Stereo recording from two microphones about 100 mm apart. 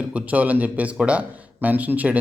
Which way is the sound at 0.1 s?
15° right (ahead or behind).